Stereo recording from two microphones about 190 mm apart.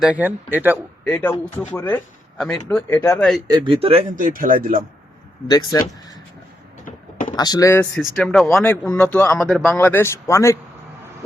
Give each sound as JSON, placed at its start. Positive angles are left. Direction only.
{"t": 0.0, "sound": "speech", "side_deg": -10}
{"t": 1.0, "sound": "speech", "side_deg": 10}
{"t": 3.4, "sound": "speech", "side_deg": -25}
{"t": 4.2, "sound": "speech", "side_deg": -45}
{"t": 5.5, "sound": "speech", "side_deg": 20}
{"t": 6.8, "sound": "a sound", "side_deg": 45}
{"t": 7.3, "sound": "speech", "side_deg": 20}
{"t": 7.9, "sound": "speech", "side_deg": 0}